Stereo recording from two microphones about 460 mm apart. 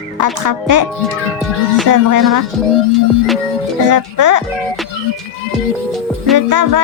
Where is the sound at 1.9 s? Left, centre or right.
Right.